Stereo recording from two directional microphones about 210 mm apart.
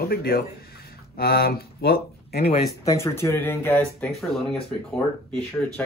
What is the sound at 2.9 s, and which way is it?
Speech, 15° left (ahead or behind).